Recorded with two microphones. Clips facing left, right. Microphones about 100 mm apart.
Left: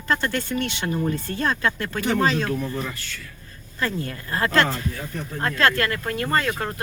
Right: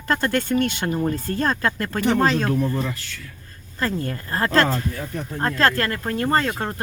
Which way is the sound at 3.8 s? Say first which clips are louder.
Right 2 dB; 40° right (ahead or behind).